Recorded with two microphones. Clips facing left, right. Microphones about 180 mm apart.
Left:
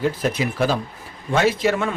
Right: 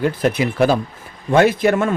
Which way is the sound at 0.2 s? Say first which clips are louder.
Right 5 dB; 60° right (ahead or behind).